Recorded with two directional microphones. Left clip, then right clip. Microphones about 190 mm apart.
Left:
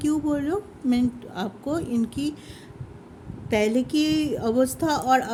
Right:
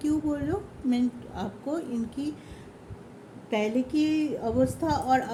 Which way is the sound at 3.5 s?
55° left (ahead or behind).